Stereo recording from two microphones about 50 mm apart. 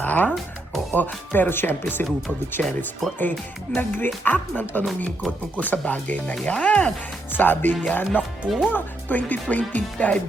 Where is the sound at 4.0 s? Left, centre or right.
Left; by 6.9 s centre.